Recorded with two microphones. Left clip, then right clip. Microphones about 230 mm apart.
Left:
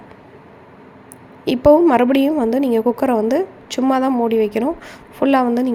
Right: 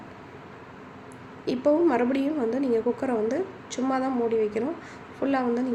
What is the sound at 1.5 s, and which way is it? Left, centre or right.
A woman's voice, left.